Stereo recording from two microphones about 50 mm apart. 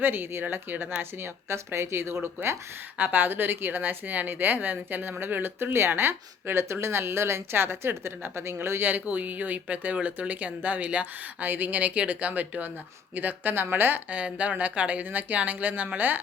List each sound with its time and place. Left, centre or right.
0.0 s speech: right
1.2 s speech: right
3.0 s speech: right
8.8 s speech: right
14.3 s speech: right